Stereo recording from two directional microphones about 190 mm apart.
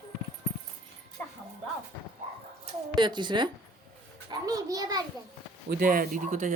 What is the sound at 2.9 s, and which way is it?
Speech, 25° right (ahead or behind).